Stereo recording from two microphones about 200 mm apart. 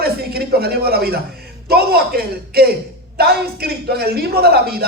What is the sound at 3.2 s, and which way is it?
Speech, 50° right (ahead or behind).